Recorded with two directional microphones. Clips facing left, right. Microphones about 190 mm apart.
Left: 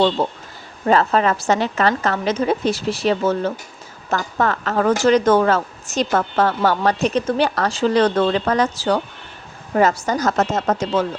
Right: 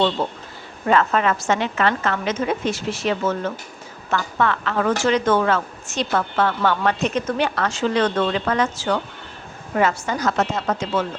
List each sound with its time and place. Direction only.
0.2 s speech: 40° left (ahead or behind)